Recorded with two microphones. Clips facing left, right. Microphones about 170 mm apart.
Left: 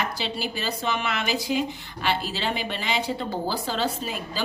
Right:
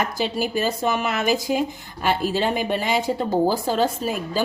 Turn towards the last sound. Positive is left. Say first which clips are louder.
# right 7 dB
turn(degrees=-45)  # may be behind; listen again after turning